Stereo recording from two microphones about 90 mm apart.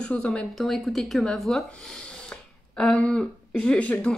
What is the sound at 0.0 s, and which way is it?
A woman's voice, 10° left (ahead or behind).